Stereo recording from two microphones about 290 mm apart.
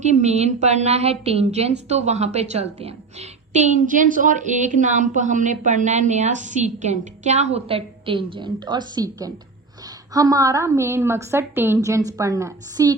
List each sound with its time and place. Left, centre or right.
0.0 s a woman's voice: right